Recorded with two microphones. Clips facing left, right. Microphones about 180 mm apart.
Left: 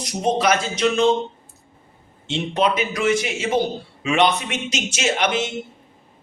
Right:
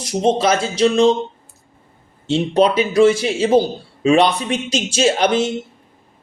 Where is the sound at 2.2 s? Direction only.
35° right (ahead or behind).